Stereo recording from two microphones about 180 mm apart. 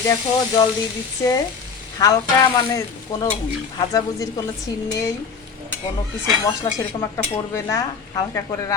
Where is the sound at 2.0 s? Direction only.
20° left (ahead or behind).